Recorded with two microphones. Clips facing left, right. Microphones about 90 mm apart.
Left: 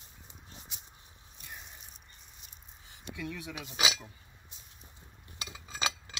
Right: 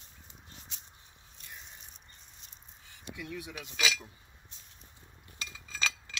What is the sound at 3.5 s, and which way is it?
Cutlery, 20° left (ahead or behind).